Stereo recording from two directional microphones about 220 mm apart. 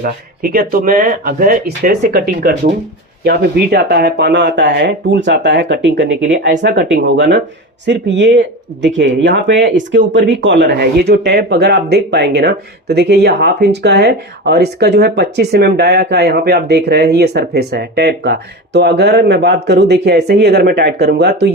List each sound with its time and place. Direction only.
0.0 s speech: 40° right (ahead or behind)